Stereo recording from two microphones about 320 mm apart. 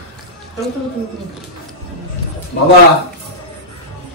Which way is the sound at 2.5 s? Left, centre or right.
Left.